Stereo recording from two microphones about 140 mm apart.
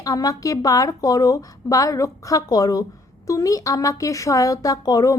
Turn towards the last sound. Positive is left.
turn(degrees=25)  # may be behind; listen again after turning